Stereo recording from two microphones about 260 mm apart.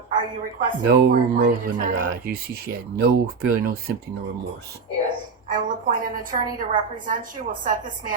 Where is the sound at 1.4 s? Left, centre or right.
Right.